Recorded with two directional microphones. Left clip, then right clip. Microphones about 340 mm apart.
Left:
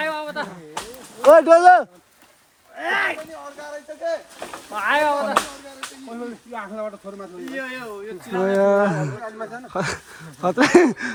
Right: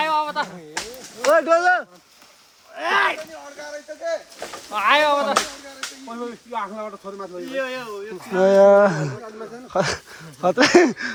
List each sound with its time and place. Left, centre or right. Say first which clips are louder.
0.0 s a sound: right 5 dB; centre
1.2 s speech: left 6 dB; centre
2.7 s speech: right 2 dB; centre
4.7 s speech: right 2 dB; right
6.5 s speech: right 1 dB; centre